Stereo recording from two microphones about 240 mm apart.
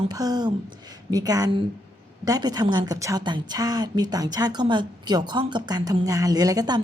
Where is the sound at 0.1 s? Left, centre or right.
Centre.